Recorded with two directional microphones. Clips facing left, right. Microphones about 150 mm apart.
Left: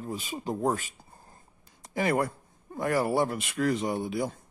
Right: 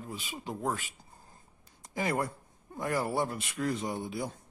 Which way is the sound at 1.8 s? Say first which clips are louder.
Left 5 dB; 70° left (ahead or behind).